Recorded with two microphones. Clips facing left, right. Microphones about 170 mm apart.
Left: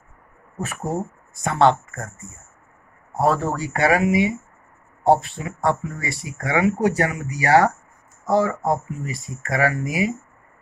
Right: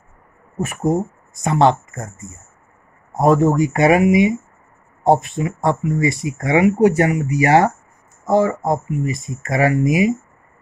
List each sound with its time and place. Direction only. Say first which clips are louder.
0.6 s speech: right 7 dB; 15° right (ahead or behind)